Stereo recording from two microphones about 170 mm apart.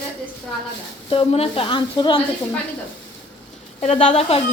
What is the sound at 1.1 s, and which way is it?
A woman's voice, 35° left (ahead or behind).